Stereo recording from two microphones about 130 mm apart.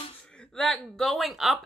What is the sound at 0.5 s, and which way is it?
Speech, 5° left (ahead or behind).